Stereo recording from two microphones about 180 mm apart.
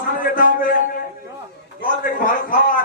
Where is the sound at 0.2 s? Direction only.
50° left (ahead or behind).